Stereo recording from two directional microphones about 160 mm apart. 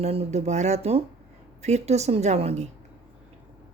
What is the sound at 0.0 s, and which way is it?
A woman's voice, 40° right (ahead or behind).